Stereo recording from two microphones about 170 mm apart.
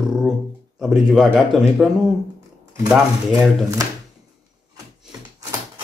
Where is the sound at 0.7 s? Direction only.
5° right (ahead or behind).